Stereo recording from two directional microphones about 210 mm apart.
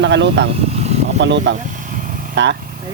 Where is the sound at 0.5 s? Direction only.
30° right (ahead or behind).